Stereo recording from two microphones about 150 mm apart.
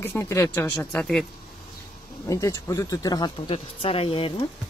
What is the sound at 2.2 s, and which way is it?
Speech, 20° left (ahead or behind).